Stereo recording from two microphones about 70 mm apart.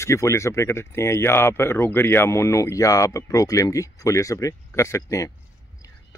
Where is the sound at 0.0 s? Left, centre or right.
Left.